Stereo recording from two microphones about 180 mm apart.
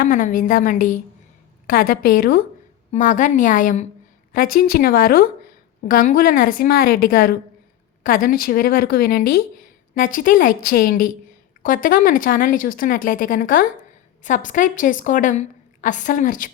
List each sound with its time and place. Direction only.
0.0 s a woman's voice: 50° left (ahead or behind)